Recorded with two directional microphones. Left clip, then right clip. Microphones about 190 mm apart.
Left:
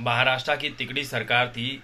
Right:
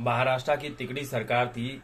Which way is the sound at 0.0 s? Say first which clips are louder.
Left 3 dB; 5° right (ahead or behind).